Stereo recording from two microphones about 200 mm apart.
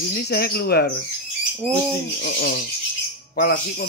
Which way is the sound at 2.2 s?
55° left (ahead or behind).